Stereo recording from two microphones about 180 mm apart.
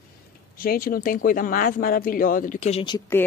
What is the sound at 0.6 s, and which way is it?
Speech, 55° left (ahead or behind).